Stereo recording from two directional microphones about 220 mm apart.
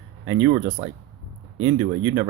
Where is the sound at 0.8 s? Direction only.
35° right (ahead or behind).